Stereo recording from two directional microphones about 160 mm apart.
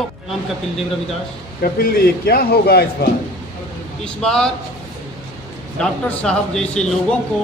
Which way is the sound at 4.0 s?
5° left (ahead or behind).